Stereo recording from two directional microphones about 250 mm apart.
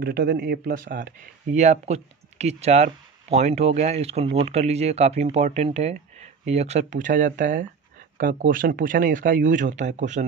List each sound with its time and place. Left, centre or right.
0.0 s speech: right